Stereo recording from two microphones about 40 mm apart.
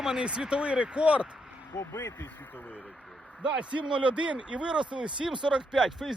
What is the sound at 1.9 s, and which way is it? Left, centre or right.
Speech, left.